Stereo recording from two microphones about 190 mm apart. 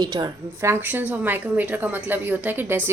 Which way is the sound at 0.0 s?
20° right (ahead or behind).